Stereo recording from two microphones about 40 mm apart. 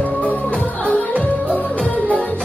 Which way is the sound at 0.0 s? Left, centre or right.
Left.